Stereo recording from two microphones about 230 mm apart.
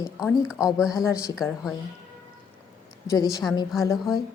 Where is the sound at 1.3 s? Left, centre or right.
Centre.